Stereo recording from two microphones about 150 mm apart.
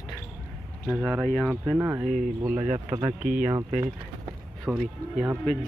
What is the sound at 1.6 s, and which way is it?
Speech, 15° right (ahead or behind).